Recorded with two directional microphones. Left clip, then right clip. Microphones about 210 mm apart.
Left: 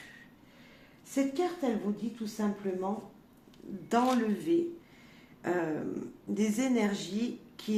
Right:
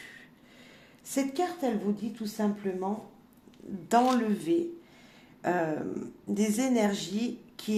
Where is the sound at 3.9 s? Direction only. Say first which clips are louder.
Right 4 dB; 40° right (ahead or behind).